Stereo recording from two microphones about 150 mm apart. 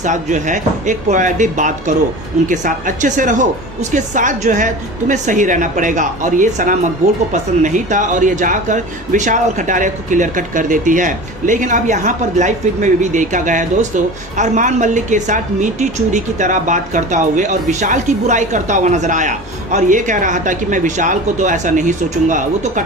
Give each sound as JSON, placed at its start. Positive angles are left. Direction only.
{"t": 0.0, "sound": "speech", "side_deg": -55}